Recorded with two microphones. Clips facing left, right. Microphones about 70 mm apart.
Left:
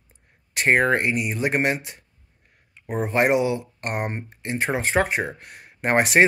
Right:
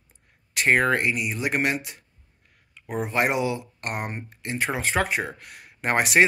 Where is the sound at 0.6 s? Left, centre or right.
Left.